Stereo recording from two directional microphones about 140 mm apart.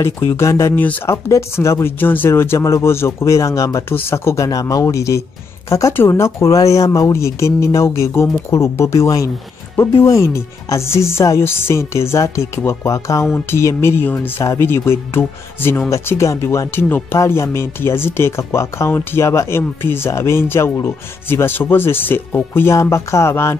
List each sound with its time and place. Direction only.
0.0 s speech: 20° left (ahead or behind)